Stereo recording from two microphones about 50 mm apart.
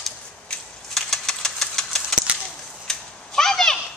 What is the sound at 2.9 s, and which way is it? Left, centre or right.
Children playing, centre.